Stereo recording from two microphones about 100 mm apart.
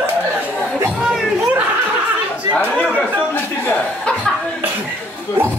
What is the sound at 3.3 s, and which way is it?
Chuckle, 15° left (ahead or behind).